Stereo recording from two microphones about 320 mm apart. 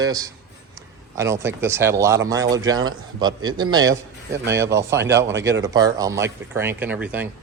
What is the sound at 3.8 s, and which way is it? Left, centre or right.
Speech, right.